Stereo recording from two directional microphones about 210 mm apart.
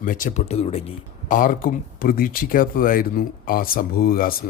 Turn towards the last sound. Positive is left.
turn(degrees=45)  # may be behind; listen again after turning